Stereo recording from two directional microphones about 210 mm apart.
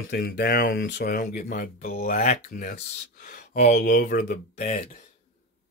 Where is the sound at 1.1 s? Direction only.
40° left (ahead or behind).